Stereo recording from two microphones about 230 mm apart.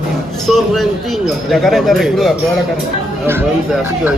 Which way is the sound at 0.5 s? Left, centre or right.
Centre.